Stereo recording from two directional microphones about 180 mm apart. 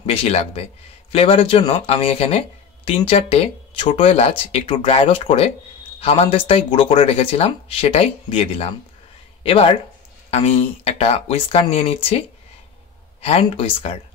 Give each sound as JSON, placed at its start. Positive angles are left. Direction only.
{"t": 0.0, "sound": "speech", "side_deg": 35}